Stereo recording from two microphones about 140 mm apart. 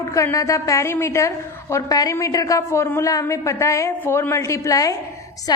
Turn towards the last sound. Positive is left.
turn(degrees=30)  # may be behind; listen again after turning